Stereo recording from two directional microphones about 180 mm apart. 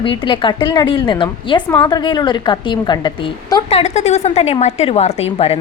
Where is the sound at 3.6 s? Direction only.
35° left (ahead or behind).